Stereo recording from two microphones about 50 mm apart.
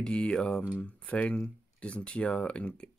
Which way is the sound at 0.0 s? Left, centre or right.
Centre.